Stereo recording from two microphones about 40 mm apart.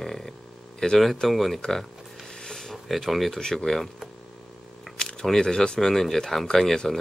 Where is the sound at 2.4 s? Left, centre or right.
Centre.